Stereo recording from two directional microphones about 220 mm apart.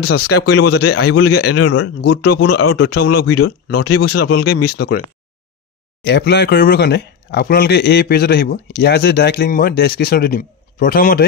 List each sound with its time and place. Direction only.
0.2 s a man's voice: 90° left
6.0 s speech: 50° left (ahead or behind)